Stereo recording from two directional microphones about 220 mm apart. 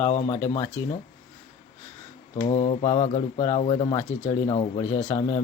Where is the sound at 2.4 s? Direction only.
25° left (ahead or behind).